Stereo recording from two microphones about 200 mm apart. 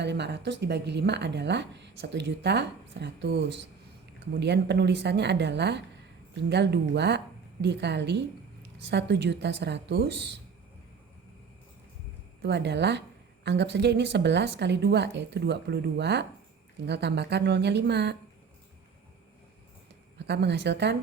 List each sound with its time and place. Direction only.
0.0 s speech: 60° right (ahead or behind)
12.4 s speech: 55° right (ahead or behind)
20.1 s speech: 60° right (ahead or behind)